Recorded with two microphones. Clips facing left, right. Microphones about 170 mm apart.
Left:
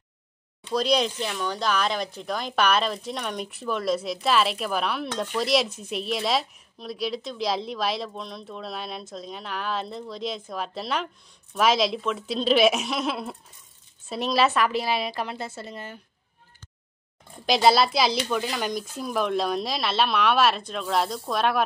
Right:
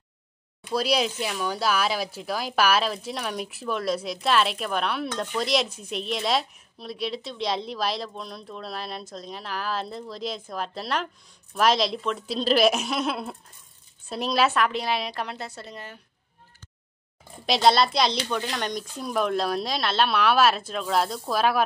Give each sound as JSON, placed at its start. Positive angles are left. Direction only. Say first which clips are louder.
{"t": 0.7, "sound": "speech", "louder": "left 1 dB", "side_deg": -5}
{"t": 17.5, "sound": "speech", "louder": "left 1 dB", "side_deg": 5}